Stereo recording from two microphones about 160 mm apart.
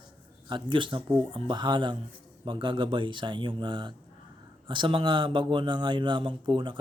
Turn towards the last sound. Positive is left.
turn(degrees=-30)  # may be behind; listen again after turning